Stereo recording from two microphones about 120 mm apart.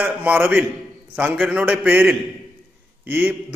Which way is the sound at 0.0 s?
15° right (ahead or behind).